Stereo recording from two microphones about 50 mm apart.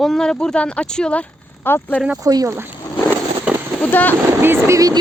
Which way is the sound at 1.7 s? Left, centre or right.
Left.